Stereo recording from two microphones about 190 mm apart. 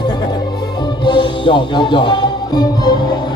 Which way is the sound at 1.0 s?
25° left (ahead or behind).